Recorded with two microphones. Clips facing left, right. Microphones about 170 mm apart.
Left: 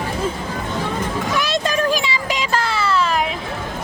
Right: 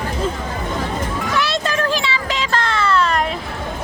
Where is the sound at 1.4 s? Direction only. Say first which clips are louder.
Even; 15° left (ahead or behind).